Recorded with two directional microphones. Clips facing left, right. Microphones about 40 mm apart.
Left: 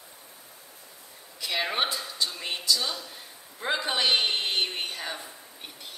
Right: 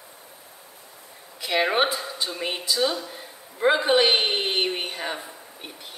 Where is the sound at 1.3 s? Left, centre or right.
Right.